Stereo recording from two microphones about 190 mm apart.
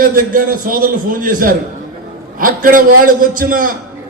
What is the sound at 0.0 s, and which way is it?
A man's voice, 45° right (ahead or behind).